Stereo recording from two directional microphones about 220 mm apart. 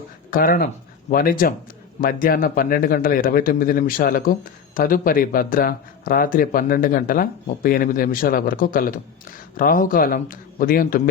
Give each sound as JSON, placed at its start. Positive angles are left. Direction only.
{"t": 0.3, "sound": "a man's voice", "side_deg": 40}